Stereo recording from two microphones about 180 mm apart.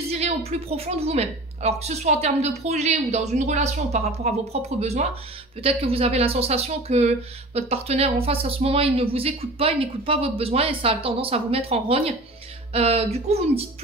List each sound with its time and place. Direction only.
0.1 s speech: 35° right (ahead or behind)